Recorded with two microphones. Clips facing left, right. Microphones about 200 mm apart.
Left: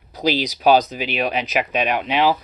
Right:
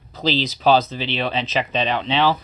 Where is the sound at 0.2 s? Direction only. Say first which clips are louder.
Left 1 dB; 15° left (ahead or behind).